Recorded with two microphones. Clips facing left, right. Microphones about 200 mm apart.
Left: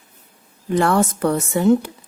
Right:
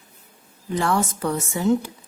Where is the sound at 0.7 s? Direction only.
60° left (ahead or behind).